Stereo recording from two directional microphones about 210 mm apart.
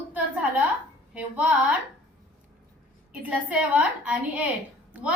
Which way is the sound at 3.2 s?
5° right (ahead or behind).